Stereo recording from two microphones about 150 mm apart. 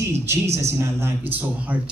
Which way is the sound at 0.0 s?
20° right (ahead or behind).